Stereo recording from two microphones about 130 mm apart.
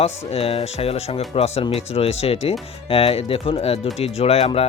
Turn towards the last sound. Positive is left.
turn(degrees=50)  # may be behind; listen again after turning